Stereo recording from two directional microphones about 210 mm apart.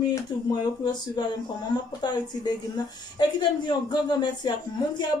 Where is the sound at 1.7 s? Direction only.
20° left (ahead or behind).